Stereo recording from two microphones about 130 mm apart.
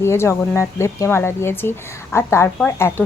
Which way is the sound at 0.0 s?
20° left (ahead or behind).